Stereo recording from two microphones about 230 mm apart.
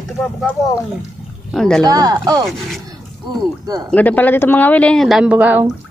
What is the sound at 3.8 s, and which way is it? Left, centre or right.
Speech, centre.